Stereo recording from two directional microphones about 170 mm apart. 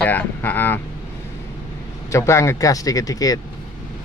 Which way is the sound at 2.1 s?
15° left (ahead or behind).